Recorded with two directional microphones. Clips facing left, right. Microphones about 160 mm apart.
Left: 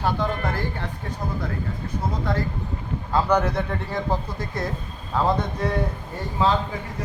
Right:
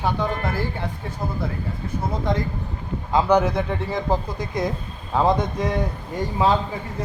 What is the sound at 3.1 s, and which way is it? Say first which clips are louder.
Speech: right 3 dB; 10° right (ahead or behind).